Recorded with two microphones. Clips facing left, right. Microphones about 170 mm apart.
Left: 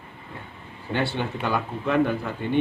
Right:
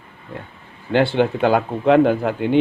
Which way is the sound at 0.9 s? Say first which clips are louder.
Right 10 dB; 90° right.